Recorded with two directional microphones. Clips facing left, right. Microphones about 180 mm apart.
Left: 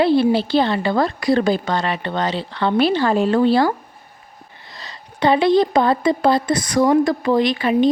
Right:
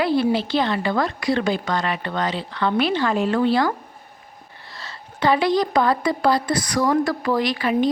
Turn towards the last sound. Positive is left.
turn(degrees=25)  # may be behind; listen again after turning